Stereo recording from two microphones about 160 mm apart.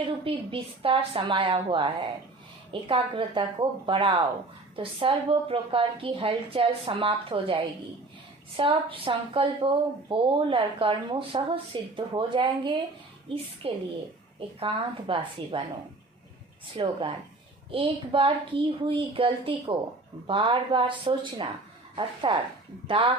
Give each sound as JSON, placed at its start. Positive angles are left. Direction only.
{"t": 0.3, "sound": "a woman's voice", "side_deg": -35}
{"t": 16.7, "sound": "a woman's voice", "side_deg": -30}